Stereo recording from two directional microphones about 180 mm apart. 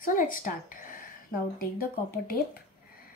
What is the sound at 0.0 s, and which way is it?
Speech, 50° left (ahead or behind).